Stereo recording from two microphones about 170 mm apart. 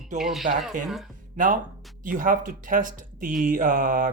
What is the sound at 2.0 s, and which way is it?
Speech, 55° right (ahead or behind).